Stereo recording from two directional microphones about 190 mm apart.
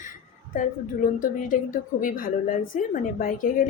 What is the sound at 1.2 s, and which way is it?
Speech, 45° left (ahead or behind).